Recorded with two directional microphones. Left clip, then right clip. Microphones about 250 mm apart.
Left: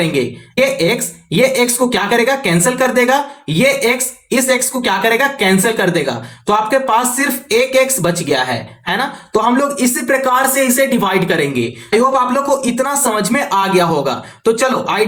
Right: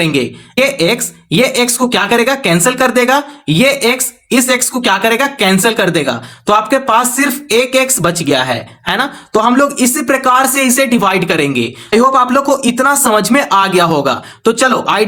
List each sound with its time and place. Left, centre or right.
0.0 s speech: right